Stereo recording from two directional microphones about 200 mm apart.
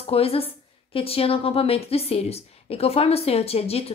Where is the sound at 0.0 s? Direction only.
30° left (ahead or behind).